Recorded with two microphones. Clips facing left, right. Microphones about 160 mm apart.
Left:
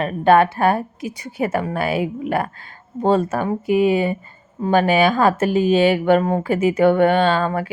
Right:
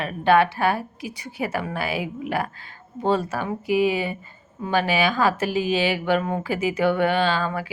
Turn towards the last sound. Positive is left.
turn(degrees=50)  # may be behind; listen again after turning